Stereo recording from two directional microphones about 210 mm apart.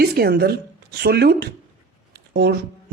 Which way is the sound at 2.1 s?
50° right (ahead or behind).